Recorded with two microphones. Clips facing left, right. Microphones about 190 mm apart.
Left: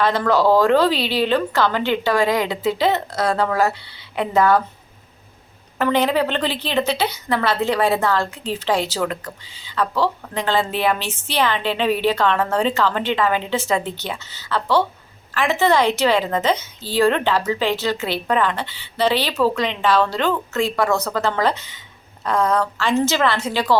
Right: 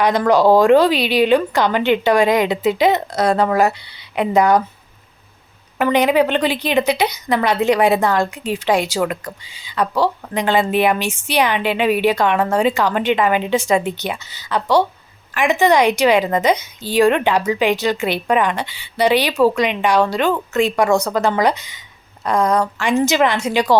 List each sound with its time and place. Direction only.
0.0 s a woman's voice: 15° right (ahead or behind)
5.8 s a woman's voice: 15° right (ahead or behind)